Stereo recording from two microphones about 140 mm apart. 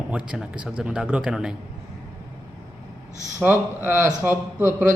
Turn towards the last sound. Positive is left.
turn(degrees=-15)  # may be behind; listen again after turning